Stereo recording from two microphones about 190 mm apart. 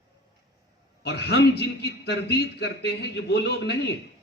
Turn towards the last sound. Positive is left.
turn(degrees=65)  # may be behind; listen again after turning